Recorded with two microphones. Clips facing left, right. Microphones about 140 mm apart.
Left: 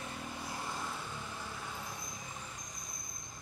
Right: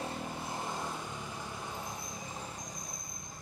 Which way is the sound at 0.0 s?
20° right (ahead or behind).